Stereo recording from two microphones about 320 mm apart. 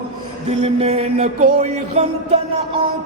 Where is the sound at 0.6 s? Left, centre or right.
Centre.